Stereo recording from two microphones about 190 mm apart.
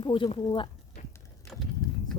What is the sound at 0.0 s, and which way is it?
Speech, 25° left (ahead or behind).